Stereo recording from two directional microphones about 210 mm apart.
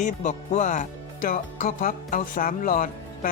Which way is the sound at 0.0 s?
35° left (ahead or behind).